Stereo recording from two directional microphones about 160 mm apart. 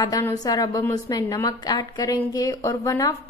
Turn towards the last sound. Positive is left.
turn(degrees=20)  # may be behind; listen again after turning